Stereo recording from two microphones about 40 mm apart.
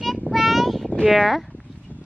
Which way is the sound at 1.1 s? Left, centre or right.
Centre.